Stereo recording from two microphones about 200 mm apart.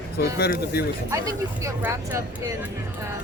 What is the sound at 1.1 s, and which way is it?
Speech, 15° right (ahead or behind).